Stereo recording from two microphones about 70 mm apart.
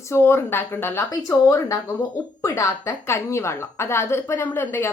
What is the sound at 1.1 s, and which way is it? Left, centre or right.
A woman's voice, left.